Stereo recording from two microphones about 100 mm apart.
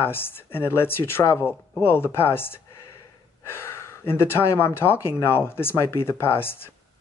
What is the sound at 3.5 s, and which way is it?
Gasp, 25° left (ahead or behind).